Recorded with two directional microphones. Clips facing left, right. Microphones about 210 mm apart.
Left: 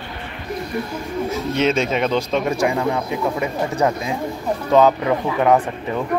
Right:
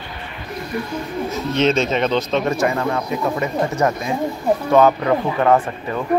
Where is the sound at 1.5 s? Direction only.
10° left (ahead or behind).